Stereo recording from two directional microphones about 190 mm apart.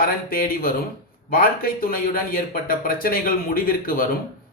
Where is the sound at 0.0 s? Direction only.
50° left (ahead or behind).